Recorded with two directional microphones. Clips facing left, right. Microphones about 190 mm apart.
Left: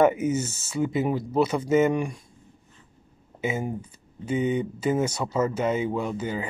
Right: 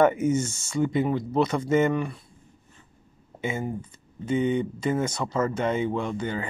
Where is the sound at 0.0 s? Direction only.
10° left (ahead or behind).